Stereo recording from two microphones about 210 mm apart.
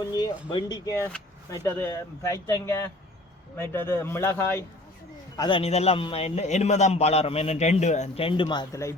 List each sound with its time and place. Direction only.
0.0 s speech: 20° left (ahead or behind)
5.4 s a man's voice: 25° left (ahead or behind)